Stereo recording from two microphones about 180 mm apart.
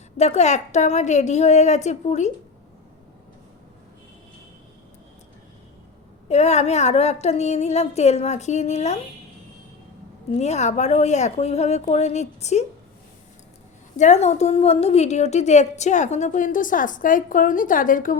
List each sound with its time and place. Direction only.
0.2 s a woman's voice: 40° left (ahead or behind)
6.2 s a woman's voice: 40° left (ahead or behind)
10.3 s a woman's voice: 40° left (ahead or behind)
14.0 s a woman's voice: 40° left (ahead or behind)